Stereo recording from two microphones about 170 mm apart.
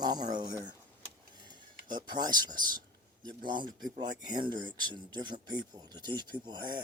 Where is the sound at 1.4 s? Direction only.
25° right (ahead or behind).